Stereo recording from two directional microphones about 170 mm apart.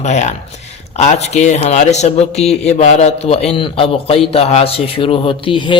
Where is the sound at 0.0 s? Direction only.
40° left (ahead or behind).